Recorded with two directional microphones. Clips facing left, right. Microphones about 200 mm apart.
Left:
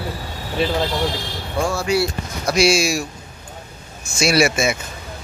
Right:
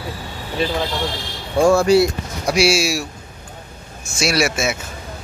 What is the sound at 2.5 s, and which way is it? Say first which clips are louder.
Speech: left 1 dB; 5° right (ahead or behind).